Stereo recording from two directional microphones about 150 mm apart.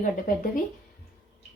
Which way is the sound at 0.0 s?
60° left (ahead or behind).